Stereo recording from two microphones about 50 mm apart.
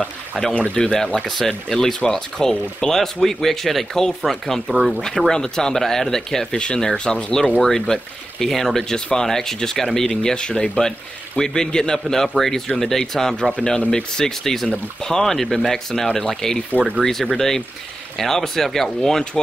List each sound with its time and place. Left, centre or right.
0.6 s speech: left
13.7 s speech: centre